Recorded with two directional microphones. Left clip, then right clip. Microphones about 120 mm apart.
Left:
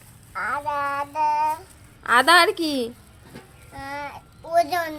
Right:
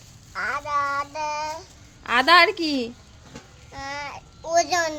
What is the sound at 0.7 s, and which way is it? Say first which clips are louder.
Child singing: right 1 dB; 35° right (ahead or behind).